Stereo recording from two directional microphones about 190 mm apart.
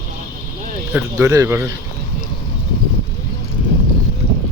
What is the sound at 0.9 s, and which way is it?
Speech, 15° right (ahead or behind).